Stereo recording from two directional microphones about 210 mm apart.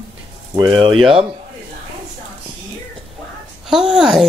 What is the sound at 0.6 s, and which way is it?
Speech, 20° right (ahead or behind).